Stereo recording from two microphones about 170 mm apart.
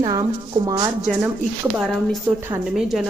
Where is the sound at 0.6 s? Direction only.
25° right (ahead or behind).